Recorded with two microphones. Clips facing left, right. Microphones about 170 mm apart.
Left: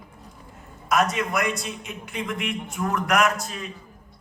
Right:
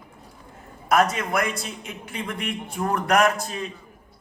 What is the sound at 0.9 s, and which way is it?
A man's voice, 30° right (ahead or behind).